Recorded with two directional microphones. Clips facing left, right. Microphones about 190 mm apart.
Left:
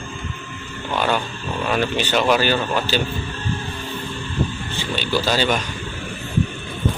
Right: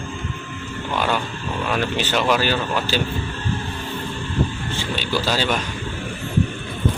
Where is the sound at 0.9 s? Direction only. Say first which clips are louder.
Left 2 dB; centre (ahead or behind).